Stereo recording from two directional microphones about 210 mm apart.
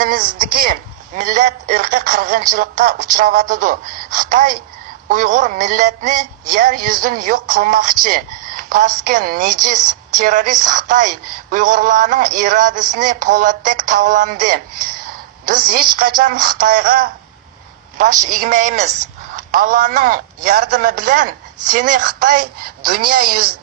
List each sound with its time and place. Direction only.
0.0 s a woman's voice: 40° right (ahead or behind)